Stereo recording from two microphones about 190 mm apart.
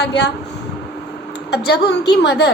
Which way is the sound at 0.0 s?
65° left (ahead or behind).